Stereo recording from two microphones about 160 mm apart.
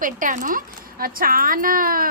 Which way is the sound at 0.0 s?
55° right (ahead or behind).